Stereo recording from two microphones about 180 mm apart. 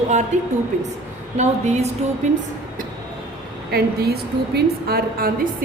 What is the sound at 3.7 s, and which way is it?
A woman's voice, 60° right (ahead or behind).